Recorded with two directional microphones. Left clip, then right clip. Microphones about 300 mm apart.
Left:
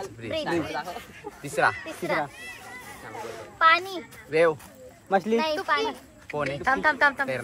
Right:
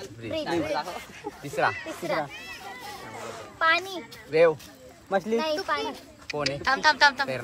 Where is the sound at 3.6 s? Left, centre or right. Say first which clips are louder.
Left 4 dB; left.